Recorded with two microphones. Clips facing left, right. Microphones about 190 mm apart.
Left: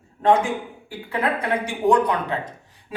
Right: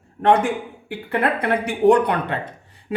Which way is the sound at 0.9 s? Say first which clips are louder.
Right 3 dB; 65° right (ahead or behind).